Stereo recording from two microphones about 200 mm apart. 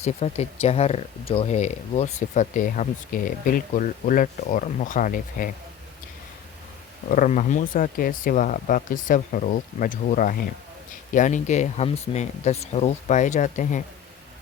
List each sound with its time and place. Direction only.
0.0 s speech: 30° left (ahead or behind)
7.1 s speech: 40° left (ahead or behind)